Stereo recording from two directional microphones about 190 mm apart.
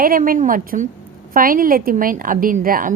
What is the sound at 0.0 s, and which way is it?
A woman's voice, 50° right (ahead or behind).